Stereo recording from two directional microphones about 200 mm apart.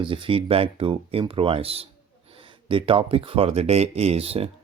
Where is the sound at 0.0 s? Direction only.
25° right (ahead or behind).